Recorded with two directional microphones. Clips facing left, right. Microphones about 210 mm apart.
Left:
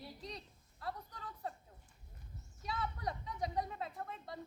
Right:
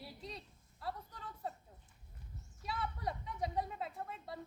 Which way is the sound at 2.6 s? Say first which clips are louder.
Even; centre (ahead or behind).